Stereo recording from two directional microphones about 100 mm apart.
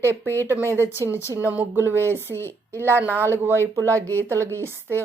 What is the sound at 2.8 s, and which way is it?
Speech, 25° right (ahead or behind).